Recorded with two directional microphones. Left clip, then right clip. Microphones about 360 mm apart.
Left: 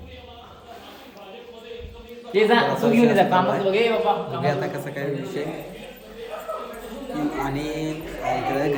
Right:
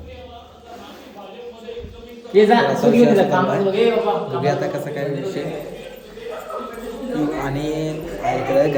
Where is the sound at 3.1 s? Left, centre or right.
Centre.